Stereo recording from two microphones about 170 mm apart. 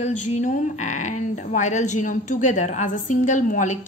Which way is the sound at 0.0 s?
45° left (ahead or behind).